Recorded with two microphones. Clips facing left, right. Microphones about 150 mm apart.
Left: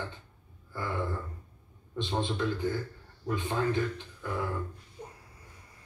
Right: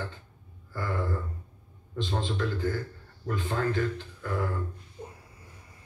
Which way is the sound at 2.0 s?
15° left (ahead or behind).